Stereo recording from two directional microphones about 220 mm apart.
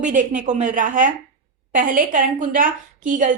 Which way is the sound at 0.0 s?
35° right (ahead or behind).